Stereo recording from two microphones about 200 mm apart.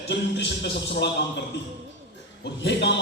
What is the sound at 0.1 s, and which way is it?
Music, 60° left (ahead or behind).